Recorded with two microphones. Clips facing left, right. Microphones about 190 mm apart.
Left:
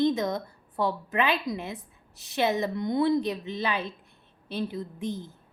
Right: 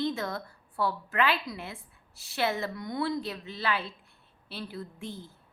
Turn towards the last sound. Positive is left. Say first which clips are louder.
# left 6 dB
turn(degrees=20)  # may be behind; listen again after turning